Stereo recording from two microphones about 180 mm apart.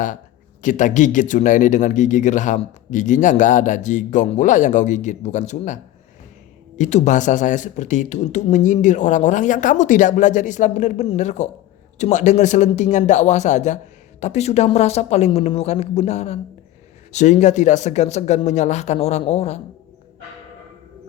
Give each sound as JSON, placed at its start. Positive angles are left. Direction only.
{"t": 0.6, "sound": "speech", "side_deg": 45}